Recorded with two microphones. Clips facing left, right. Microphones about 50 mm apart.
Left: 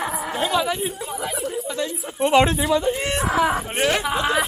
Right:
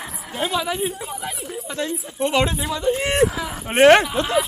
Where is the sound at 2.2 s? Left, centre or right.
Centre.